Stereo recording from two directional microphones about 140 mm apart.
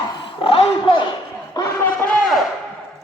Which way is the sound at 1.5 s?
20° left (ahead or behind).